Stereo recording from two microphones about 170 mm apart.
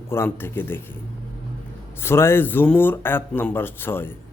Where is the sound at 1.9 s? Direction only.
15° left (ahead or behind).